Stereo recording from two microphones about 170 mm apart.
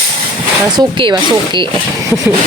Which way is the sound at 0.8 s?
25° right (ahead or behind).